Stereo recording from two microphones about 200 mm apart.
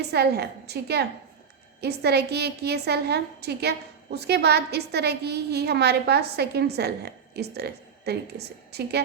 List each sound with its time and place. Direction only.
0.0 s a woman's voice: 55° right (ahead or behind)